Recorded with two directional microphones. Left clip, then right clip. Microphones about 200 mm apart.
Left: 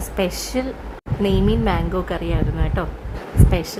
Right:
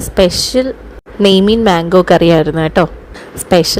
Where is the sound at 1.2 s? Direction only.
40° right (ahead or behind).